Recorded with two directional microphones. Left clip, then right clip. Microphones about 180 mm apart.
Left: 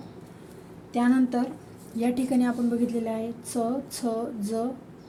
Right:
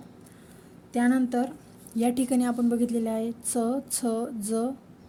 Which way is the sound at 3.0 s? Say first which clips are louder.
Right 1 dB; 70° right (ahead or behind).